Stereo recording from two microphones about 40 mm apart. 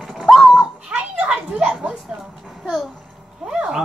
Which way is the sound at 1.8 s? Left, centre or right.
Right.